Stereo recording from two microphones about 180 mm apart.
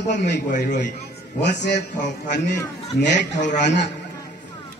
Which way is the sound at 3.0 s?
75° left (ahead or behind).